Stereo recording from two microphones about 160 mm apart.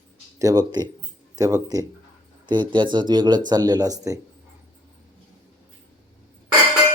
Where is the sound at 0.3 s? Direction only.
25° right (ahead or behind).